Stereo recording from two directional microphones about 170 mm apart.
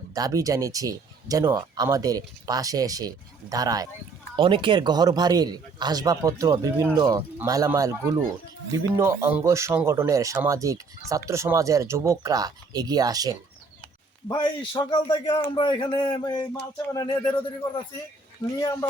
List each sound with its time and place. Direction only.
0.1 s speech: 20° right (ahead or behind)
14.3 s a man's voice: 25° left (ahead or behind)
18.6 s a man's voice: 20° left (ahead or behind)